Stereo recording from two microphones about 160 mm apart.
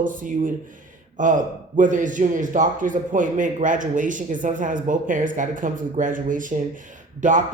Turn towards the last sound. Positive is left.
turn(degrees=-50)  # may be behind; listen again after turning